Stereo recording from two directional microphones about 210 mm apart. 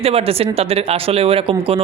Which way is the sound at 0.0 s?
30° right (ahead or behind).